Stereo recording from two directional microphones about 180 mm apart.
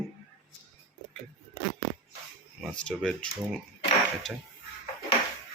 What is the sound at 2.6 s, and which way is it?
Speech, 5° left (ahead or behind).